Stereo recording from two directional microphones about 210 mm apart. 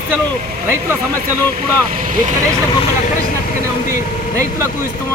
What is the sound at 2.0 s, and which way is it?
Speech, 40° right (ahead or behind).